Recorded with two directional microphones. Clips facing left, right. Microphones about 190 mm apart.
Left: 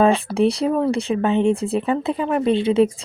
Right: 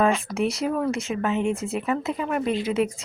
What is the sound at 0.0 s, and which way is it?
Speech, 30° left (ahead or behind).